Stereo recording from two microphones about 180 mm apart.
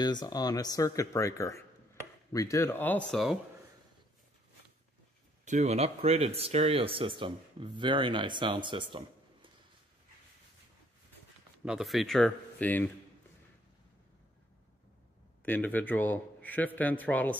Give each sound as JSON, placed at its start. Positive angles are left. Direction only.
{"t": 0.0, "sound": "a man's voice", "side_deg": 25}
{"t": 3.1, "sound": "speech", "side_deg": 0}
{"t": 5.4, "sound": "speech", "side_deg": -40}
{"t": 11.6, "sound": "speech", "side_deg": 0}
{"t": 15.4, "sound": "a man's voice", "side_deg": 10}